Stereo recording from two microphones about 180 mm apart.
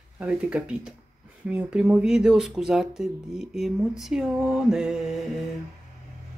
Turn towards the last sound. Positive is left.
turn(degrees=0)  # may be behind; listen again after turning